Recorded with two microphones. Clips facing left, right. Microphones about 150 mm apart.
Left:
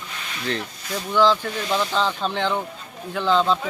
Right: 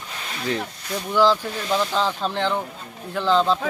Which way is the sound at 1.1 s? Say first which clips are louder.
Even; 10° right (ahead or behind).